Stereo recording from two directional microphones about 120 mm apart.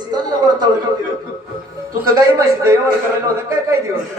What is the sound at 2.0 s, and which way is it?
Speech, 30° right (ahead or behind).